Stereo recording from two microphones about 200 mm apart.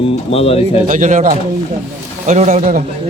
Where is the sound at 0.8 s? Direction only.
40° right (ahead or behind).